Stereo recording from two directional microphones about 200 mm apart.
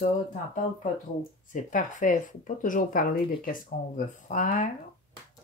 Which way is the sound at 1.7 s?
40° left (ahead or behind).